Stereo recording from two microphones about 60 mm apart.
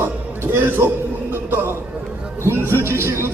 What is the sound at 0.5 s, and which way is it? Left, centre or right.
Speech, right.